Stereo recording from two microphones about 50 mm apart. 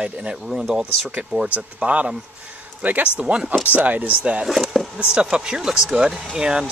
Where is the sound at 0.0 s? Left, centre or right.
Right.